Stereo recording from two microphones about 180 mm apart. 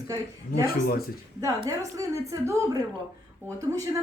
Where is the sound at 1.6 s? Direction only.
20° right (ahead or behind).